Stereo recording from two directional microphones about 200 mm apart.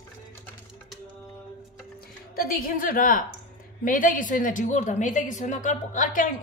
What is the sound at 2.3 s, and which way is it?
A woman's voice, 50° left (ahead or behind).